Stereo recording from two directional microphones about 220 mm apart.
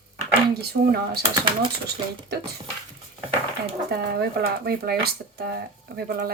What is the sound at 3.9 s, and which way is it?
Speech, 45° right (ahead or behind).